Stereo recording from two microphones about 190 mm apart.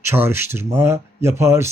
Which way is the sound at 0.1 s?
10° right (ahead or behind).